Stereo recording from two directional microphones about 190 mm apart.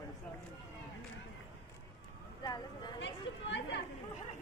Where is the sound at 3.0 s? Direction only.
70° left (ahead or behind).